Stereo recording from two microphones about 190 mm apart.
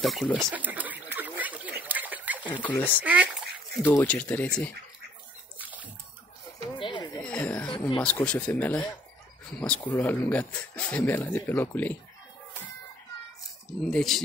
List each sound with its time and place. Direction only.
0.0 s speech: centre (ahead or behind)
0.5 s duck: 10° right (ahead or behind)
2.5 s speech: 10° left (ahead or behind)
3.0 s splash: 5° right (ahead or behind)
3.8 s speech: 10° left (ahead or behind)
5.6 s splash: 10° right (ahead or behind)
6.8 s a sound: 25° left (ahead or behind)
7.2 s a sound: 5° left (ahead or behind)
8.0 s speech: 5° left (ahead or behind)
13.8 s speech: centre (ahead or behind)